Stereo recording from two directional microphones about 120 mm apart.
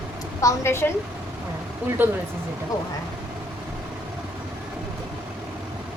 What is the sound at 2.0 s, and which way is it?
Speech, 15° right (ahead or behind).